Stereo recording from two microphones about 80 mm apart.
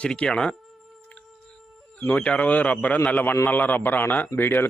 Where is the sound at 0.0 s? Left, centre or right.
Centre.